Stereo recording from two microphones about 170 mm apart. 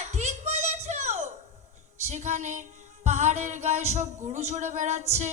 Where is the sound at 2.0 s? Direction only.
40° right (ahead or behind).